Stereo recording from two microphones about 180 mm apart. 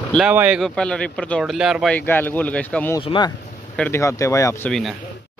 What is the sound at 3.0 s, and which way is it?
Speech, 25° left (ahead or behind).